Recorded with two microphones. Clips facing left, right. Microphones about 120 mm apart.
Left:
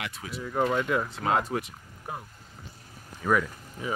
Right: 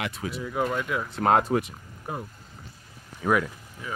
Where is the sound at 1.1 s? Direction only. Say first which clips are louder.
Right 5 dB; 55° right (ahead or behind).